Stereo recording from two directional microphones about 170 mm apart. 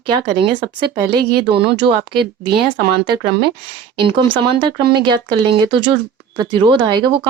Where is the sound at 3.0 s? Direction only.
25° right (ahead or behind).